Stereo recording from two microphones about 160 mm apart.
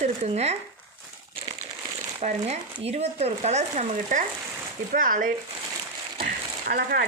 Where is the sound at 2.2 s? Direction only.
40° right (ahead or behind); by 5.3 s 55° right (ahead or behind).